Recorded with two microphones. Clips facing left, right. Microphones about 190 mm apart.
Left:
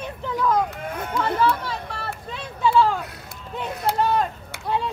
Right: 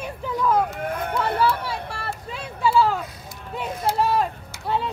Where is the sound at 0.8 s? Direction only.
60° right (ahead or behind).